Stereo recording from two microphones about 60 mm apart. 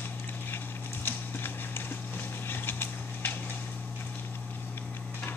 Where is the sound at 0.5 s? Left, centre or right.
Left.